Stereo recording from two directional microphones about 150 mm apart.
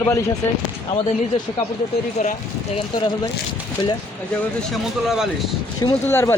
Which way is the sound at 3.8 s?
30° left (ahead or behind).